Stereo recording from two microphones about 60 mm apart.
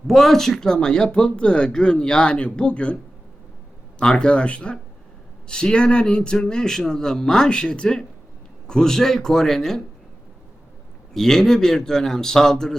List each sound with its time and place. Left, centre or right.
0.1 s speech: centre
11.1 s speech: centre